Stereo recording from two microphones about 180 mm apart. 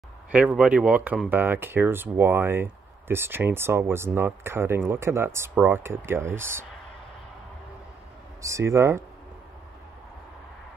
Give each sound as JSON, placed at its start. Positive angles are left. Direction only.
{"t": 0.3, "sound": "speech", "side_deg": -5}
{"t": 8.4, "sound": "speech", "side_deg": -15}